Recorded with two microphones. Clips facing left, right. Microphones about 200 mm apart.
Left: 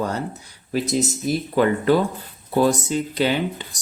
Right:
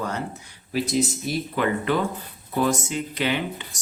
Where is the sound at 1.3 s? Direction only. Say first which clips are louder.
Left 5 dB; 35° left (ahead or behind).